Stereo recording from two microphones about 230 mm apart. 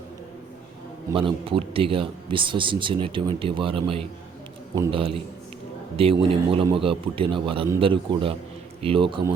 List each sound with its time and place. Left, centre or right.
1.1 s speech: right